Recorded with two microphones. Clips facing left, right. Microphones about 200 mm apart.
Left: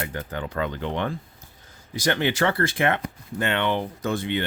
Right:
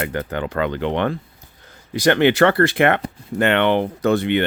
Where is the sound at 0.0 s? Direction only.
70° right (ahead or behind).